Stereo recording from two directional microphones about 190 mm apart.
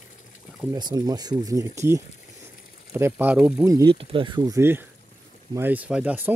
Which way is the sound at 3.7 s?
25° right (ahead or behind).